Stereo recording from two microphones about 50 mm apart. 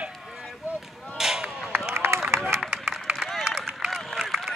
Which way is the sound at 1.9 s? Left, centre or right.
Right.